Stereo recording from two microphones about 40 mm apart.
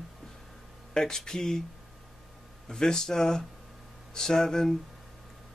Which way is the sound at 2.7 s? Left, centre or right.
Centre.